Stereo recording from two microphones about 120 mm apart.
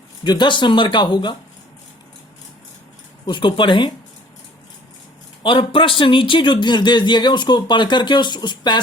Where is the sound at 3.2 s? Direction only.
40° left (ahead or behind).